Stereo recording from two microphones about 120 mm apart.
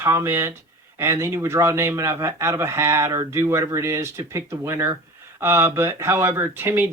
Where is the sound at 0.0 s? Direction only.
20° right (ahead or behind).